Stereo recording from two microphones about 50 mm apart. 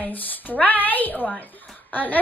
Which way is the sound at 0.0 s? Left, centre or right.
Left.